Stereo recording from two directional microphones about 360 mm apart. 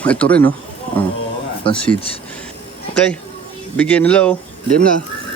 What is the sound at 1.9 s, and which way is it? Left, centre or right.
Speech, centre.